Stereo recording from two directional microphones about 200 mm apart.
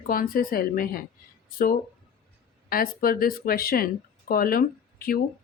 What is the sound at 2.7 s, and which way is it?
Speech, 45° left (ahead or behind).